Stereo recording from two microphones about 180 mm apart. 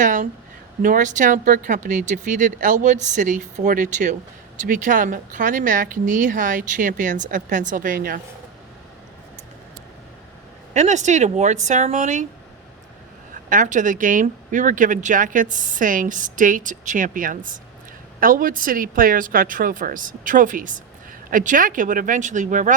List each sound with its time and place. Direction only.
0.0 s speech: 45° right (ahead or behind)
10.8 s a woman's voice: 40° right (ahead or behind)
13.5 s speech: 45° right (ahead or behind)